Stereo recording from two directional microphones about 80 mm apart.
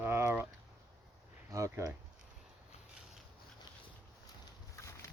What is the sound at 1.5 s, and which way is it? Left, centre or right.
Speech, right.